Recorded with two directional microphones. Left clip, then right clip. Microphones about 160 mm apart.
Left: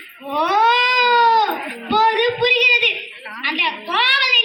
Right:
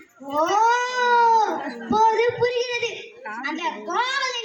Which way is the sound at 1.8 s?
10° right (ahead or behind).